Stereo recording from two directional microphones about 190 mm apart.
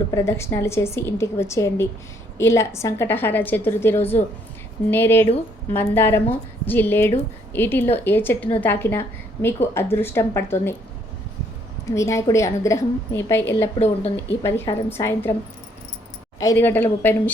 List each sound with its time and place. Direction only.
0.1 s a woman's voice: 15° left (ahead or behind)
11.9 s a woman's voice: 15° left (ahead or behind)
13.7 s speech: 35° left (ahead or behind)
14.4 s a woman's voice: 15° left (ahead or behind)
16.4 s a woman's voice: 15° left (ahead or behind)